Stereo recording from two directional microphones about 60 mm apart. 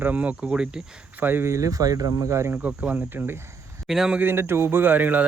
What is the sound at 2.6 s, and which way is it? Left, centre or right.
Speech, right.